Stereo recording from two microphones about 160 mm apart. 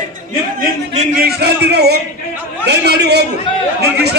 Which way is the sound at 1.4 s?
90° right.